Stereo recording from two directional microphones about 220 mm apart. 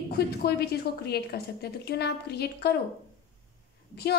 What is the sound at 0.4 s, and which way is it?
A woman's voice, 45° left (ahead or behind).